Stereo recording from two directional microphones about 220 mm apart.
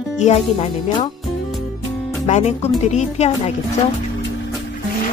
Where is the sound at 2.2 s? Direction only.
30° left (ahead or behind).